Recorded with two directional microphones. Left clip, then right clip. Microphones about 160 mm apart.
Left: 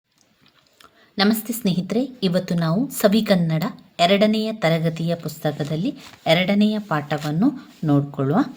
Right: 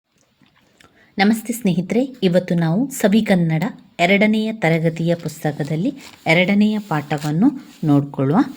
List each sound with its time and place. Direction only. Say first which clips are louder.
0.8 s a woman's voice: right 3 dB; 15° right (ahead or behind)